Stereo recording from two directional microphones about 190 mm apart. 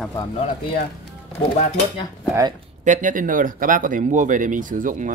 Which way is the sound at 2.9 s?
45° right (ahead or behind).